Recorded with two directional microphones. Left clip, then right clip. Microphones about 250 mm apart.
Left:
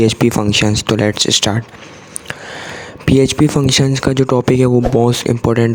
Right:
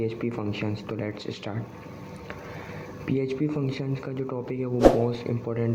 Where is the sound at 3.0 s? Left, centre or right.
Left.